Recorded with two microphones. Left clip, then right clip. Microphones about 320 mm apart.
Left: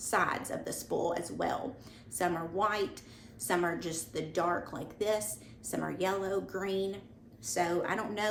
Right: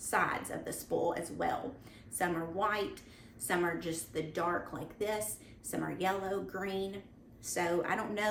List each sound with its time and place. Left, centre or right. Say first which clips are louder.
0.1 s a woman's voice: left 2 dB; centre